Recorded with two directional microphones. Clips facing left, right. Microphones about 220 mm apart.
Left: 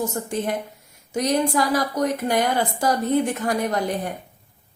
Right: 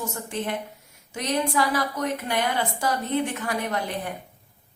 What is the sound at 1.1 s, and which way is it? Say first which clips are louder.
A woman's voice: left 5 dB; 40° left (ahead or behind).